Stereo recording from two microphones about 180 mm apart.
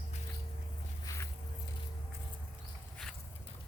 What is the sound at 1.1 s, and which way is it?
Boat, 20° left (ahead or behind).